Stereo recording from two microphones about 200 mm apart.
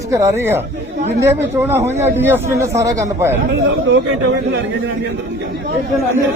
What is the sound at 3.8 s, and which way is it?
Speech, 70° right (ahead or behind).